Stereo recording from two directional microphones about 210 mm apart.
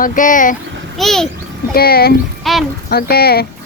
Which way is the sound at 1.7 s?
45° left (ahead or behind).